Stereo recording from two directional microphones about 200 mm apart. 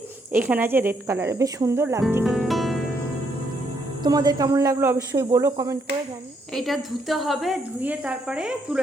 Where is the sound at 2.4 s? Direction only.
Centre (ahead or behind).